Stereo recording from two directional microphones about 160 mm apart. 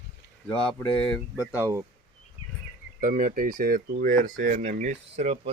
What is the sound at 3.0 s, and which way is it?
Speech, 55° right (ahead or behind).